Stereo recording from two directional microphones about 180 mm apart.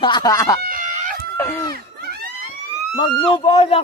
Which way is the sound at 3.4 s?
35° left (ahead or behind).